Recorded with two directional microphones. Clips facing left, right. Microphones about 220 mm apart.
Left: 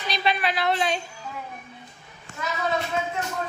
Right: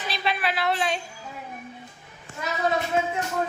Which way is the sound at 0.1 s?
5° right (ahead or behind).